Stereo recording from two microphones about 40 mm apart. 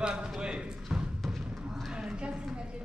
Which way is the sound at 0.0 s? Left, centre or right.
Right.